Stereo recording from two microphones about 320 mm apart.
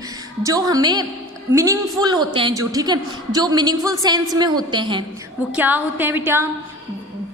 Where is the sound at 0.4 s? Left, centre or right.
Centre.